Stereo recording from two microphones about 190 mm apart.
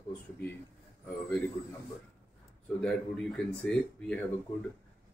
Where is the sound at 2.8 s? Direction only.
5° left (ahead or behind).